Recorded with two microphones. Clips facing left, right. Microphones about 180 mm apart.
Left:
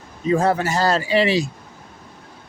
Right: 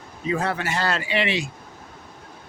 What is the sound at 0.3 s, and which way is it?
Speech, 40° left (ahead or behind).